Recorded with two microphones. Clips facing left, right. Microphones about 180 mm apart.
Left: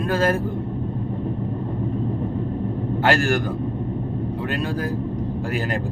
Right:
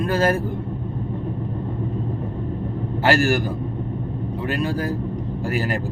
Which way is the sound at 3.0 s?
5° right (ahead or behind).